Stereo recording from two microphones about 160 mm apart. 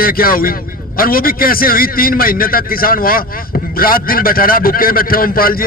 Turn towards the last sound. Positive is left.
turn(degrees=65)  # may be behind; listen again after turning